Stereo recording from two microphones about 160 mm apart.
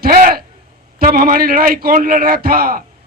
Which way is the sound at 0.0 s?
65° right (ahead or behind).